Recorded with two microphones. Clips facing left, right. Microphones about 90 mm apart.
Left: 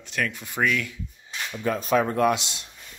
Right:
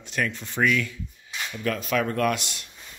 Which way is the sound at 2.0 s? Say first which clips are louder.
Left 3 dB; 20° left (ahead or behind).